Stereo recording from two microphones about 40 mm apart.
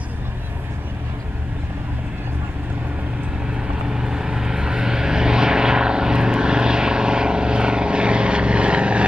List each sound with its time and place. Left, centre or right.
3.8 s vehicle: centre